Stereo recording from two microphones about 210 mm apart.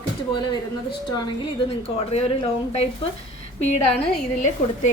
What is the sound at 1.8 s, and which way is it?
A woman's voice, 30° left (ahead or behind).